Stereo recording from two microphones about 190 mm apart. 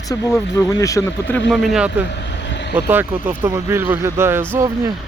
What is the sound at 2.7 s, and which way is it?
Speech, 10° right (ahead or behind).